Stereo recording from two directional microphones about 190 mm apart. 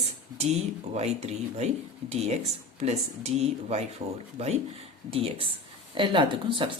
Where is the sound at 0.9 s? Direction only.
35° right (ahead or behind).